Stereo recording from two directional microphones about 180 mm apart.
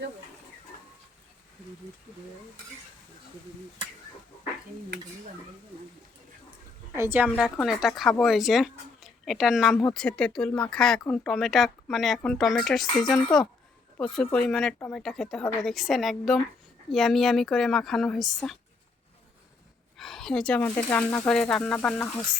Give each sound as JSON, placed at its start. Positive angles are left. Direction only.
{"t": 6.9, "sound": "a woman's voice", "side_deg": -15}
{"t": 7.6, "sound": "speech", "side_deg": 0}
{"t": 13.2, "sound": "speech", "side_deg": 25}
{"t": 14.0, "sound": "speech", "side_deg": 5}
{"t": 20.0, "sound": "speech", "side_deg": 0}